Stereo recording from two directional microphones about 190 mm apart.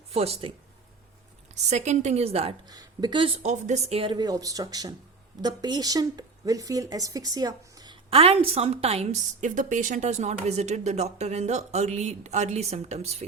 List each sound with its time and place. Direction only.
0.1 s speech: 30° right (ahead or behind)
1.7 s a woman's voice: 35° right (ahead or behind)
2.6 s a woman's voice: 20° right (ahead or behind)